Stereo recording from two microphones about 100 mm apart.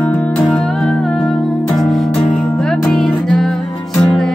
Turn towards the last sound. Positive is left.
turn(degrees=5)  # may be behind; listen again after turning